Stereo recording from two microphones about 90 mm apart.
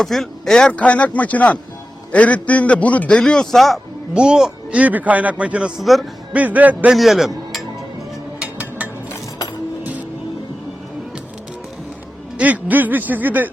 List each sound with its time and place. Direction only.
0.0 s a man's voice: 5° left (ahead or behind)
4.1 s a man's voice: 10° right (ahead or behind)
5.8 s speech: centre (ahead or behind)
6.3 s a man's voice: 15° right (ahead or behind)
6.9 s a man's voice: centre (ahead or behind)
8.4 s a sound: 15° right (ahead or behind)
12.4 s a man's voice: 20° right (ahead or behind)